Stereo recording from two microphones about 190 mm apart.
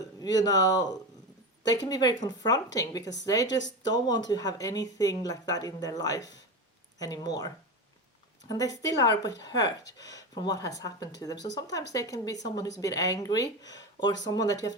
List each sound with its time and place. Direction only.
0.2 s speech: 20° left (ahead or behind)